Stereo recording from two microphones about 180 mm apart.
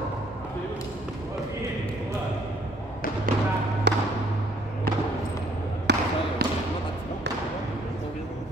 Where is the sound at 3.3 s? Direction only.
50° right (ahead or behind).